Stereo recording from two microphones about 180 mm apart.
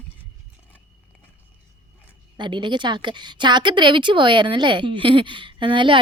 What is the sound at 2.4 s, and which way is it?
A woman's voice, 25° right (ahead or behind).